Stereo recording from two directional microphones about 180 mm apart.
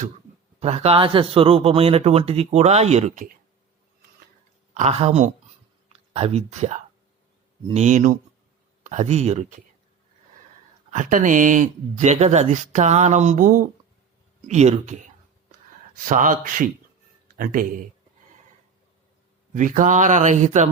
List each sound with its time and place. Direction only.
0.6 s speech: 35° right (ahead or behind)
4.7 s speech: 40° right (ahead or behind)
10.9 s speech: 45° right (ahead or behind)
16.0 s speech: 45° right (ahead or behind)
19.5 s speech: 45° right (ahead or behind)